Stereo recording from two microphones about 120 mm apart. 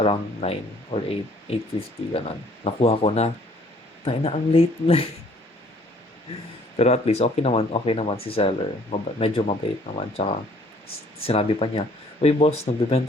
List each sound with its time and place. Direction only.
0.0 s speech: 50° left (ahead or behind)
6.7 s speech: 60° left (ahead or behind)